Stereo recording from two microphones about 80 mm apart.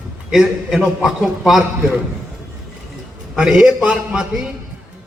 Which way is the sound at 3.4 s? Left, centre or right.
Centre.